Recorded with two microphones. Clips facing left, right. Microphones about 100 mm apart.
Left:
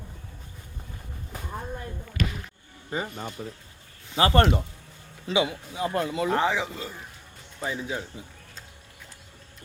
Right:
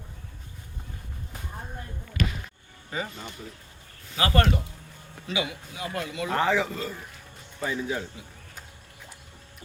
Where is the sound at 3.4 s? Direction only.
50° left (ahead or behind).